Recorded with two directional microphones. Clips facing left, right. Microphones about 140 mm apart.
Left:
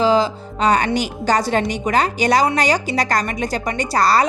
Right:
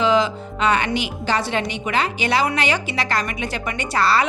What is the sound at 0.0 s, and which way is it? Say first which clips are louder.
A woman's voice: left 2 dB; 35° left (ahead or behind).